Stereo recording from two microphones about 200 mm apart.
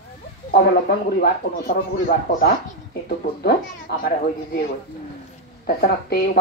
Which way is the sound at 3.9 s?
55° left (ahead or behind).